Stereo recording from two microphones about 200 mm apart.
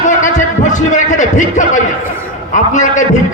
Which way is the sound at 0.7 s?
40° left (ahead or behind).